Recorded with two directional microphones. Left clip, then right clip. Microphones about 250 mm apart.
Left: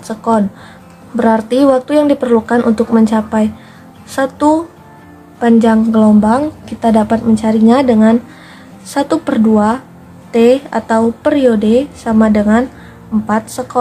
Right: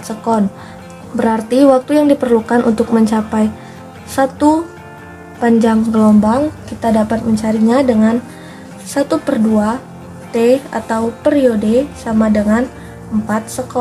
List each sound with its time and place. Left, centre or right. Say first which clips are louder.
1.1 s a woman's voice: left 2 dB; centre